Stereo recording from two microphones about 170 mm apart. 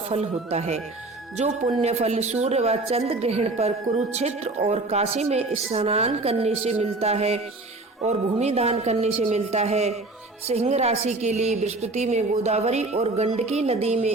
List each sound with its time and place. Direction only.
0.1 s a woman's voice: 40° right (ahead or behind)